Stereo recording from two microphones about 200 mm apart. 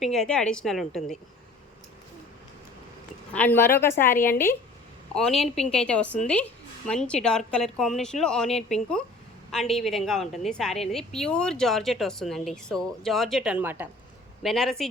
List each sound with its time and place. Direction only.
0.0 s a woman's voice: centre (ahead or behind)
3.3 s a woman's voice: 10° left (ahead or behind); by 13.9 s 10° right (ahead or behind)
14.4 s a woman's voice: centre (ahead or behind)